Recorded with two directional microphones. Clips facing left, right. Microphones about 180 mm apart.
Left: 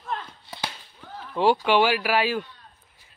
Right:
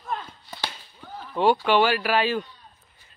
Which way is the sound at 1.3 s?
10° left (ahead or behind).